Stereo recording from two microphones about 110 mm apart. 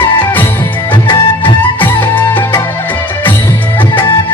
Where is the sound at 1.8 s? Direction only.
20° left (ahead or behind).